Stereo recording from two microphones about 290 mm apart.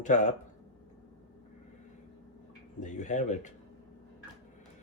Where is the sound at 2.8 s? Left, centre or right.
Left.